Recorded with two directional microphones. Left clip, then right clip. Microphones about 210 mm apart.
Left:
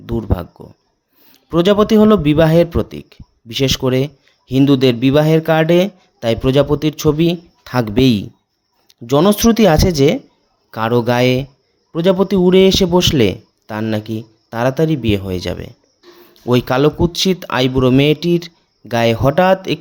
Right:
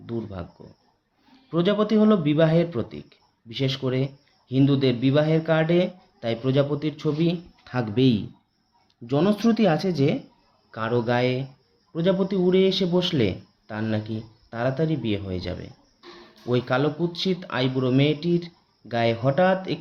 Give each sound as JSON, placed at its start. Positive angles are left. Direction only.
{"t": 0.0, "sound": "speech", "side_deg": 50}
{"t": 1.5, "sound": "speech", "side_deg": 50}